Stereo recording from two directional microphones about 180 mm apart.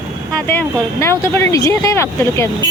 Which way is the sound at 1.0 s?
15° left (ahead or behind).